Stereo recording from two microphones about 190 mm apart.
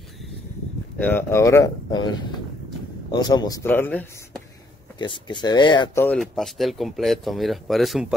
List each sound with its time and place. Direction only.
0.9 s speech: 10° left (ahead or behind)
4.9 s speech: 25° left (ahead or behind)
5.9 s speech: 5° left (ahead or behind)